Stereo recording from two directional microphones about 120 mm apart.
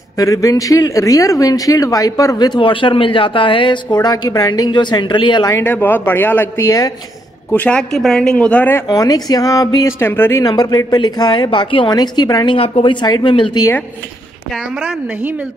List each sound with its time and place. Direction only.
0.2 s speech: 30° left (ahead or behind)
5.5 s speech: 20° left (ahead or behind)
8.9 s speech: 30° left (ahead or behind)
10.4 s speech: 35° left (ahead or behind)
12.5 s speech: 55° left (ahead or behind)
14.5 s a woman's voice: 10° right (ahead or behind)